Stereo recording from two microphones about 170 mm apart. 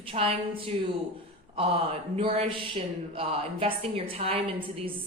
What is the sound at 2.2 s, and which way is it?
Speech, 35° right (ahead or behind).